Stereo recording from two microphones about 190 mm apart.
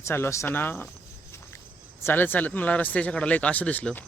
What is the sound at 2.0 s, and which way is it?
Speech, 10° left (ahead or behind).